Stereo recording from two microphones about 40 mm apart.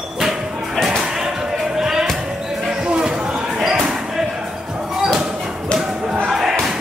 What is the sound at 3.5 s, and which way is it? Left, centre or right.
Basketball bounce, centre.